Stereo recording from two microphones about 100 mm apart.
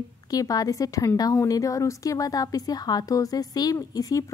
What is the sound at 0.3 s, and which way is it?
A woman's voice, 35° left (ahead or behind).